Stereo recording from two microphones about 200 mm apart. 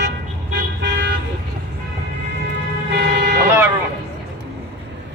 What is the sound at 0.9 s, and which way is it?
Toot, 60° right (ahead or behind).